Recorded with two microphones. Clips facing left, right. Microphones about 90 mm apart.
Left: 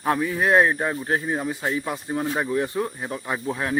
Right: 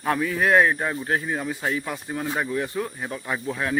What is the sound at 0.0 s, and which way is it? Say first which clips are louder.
Speech: left 1 dB; 20° left (ahead or behind).